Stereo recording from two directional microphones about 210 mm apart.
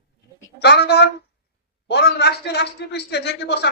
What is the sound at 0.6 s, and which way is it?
A man's voice, 50° left (ahead or behind).